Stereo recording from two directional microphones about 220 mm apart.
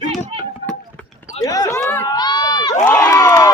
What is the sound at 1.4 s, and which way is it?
Speech, 15° left (ahead or behind).